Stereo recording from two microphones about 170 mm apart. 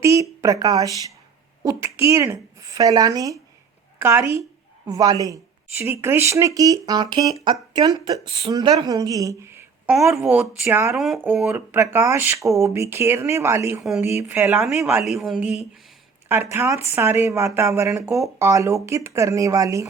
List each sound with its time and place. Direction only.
0.0 s a woman's voice: 20° right (ahead or behind)
10.9 s speech: centre (ahead or behind)
15.0 s speech: centre (ahead or behind); by 19.9 s 20° right (ahead or behind)